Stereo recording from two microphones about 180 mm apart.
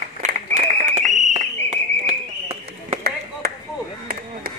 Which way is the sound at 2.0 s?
35° right (ahead or behind).